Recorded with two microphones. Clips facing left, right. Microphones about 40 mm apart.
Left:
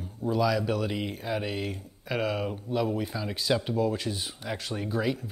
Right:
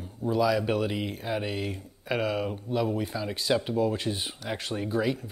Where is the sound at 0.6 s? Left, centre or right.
Right.